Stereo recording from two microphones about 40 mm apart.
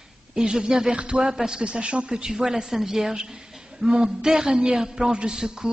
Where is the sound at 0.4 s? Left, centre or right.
Centre.